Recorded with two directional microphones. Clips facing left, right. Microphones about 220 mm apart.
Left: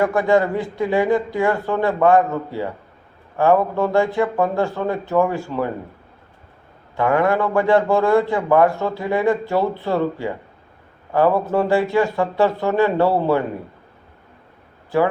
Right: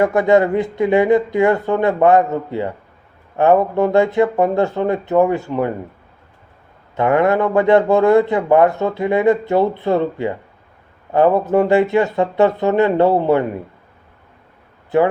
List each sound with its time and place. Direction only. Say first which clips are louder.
0.0 s speech: right 3 dB; 20° right (ahead or behind)
6.9 s speech: right 3 dB; 20° right (ahead or behind)